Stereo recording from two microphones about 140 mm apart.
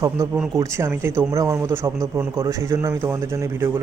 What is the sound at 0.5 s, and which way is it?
Speech, 20° right (ahead or behind).